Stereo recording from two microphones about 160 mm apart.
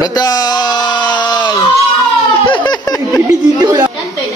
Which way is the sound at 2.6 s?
25° left (ahead or behind).